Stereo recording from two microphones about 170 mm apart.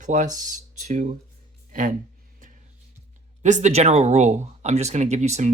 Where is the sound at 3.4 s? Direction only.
45° right (ahead or behind).